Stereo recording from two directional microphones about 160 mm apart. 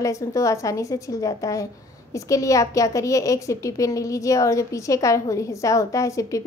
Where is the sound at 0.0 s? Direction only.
20° left (ahead or behind).